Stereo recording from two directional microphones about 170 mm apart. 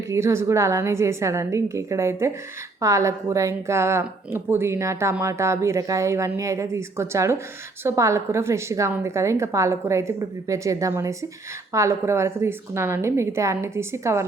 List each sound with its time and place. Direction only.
0.1 s a woman's voice: 15° right (ahead or behind)